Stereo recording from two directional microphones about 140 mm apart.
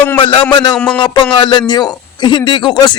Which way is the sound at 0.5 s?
30° left (ahead or behind).